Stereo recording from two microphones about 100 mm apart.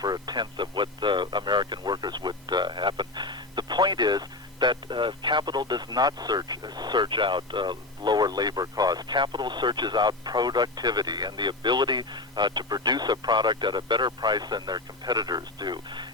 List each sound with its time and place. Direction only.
0.0 s speech: 40° right (ahead or behind)